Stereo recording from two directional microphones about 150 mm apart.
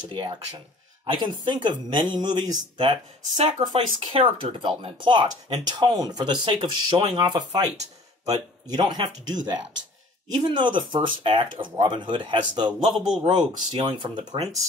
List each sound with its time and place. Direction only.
0.1 s speech: 30° right (ahead or behind)
3.3 s speech: 50° right (ahead or behind)
3.6 s speech: 35° right (ahead or behind)
12.9 s a man's voice: 5° right (ahead or behind)
13.3 s speech: 30° right (ahead or behind)